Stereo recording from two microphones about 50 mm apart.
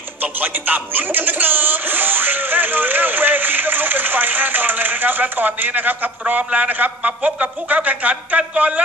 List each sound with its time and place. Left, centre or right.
0.2 s speech: right